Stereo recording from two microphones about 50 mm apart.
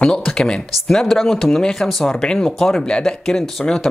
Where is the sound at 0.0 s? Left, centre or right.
Centre.